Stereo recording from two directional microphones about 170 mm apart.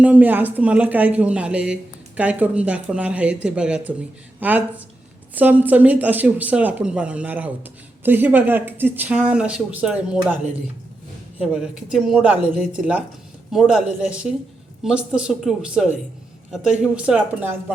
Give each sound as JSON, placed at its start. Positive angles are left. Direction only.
{"t": 0.0, "sound": "speech", "side_deg": -10}
{"t": 11.3, "sound": "speech", "side_deg": -5}